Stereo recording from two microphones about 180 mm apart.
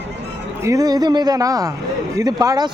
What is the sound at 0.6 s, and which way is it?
Speech, 20° right (ahead or behind).